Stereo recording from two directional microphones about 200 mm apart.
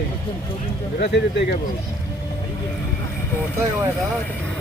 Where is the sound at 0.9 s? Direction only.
60° left (ahead or behind).